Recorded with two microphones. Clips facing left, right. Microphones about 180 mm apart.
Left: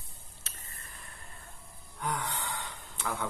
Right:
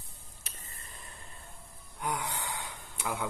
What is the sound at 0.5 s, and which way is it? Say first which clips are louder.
Tick-tock: right 1 dB; 15° right (ahead or behind).